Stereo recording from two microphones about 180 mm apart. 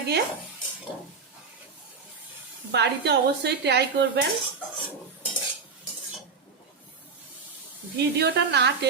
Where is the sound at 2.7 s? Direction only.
70° right (ahead or behind).